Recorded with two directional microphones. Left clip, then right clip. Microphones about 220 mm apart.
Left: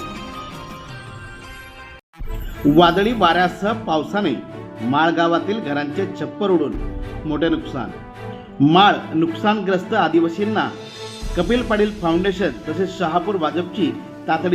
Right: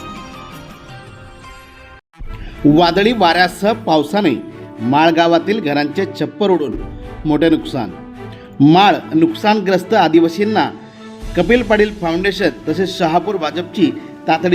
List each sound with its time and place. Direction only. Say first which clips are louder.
2.7 s a man's voice: right 1 dB; 30° right (ahead or behind)